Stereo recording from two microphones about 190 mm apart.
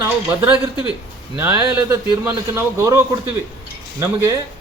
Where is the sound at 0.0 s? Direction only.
10° right (ahead or behind).